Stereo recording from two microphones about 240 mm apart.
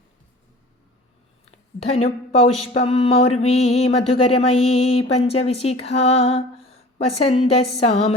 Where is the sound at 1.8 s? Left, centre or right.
Left.